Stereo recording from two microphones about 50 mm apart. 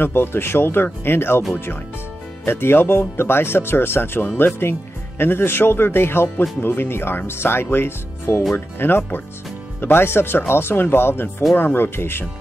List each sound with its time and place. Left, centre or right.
0.0 s speech: left
2.4 s speech: left